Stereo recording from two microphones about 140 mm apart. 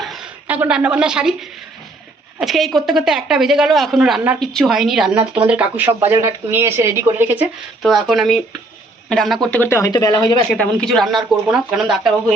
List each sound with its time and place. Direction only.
0.0 s a sound: centre (ahead or behind)
0.4 s a woman's voice: 10° right (ahead or behind)
7.8 s a woman's voice: centre (ahead or behind); by 10.3 s 30° left (ahead or behind)
10.6 s a woman's voice: 5° left (ahead or behind)